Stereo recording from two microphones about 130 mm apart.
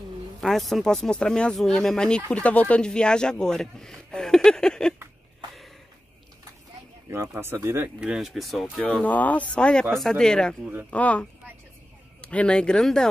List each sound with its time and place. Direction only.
0.4 s speech: centre (ahead or behind)
7.1 s speech: 20° right (ahead or behind)
8.0 s speech: 5° right (ahead or behind)